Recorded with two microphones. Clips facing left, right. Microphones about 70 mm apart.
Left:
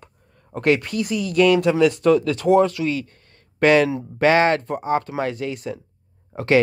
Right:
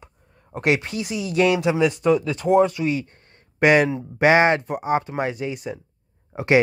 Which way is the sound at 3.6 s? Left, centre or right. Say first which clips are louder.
Left 1 dB; centre.